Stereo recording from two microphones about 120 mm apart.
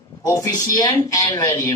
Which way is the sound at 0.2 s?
25° left (ahead or behind).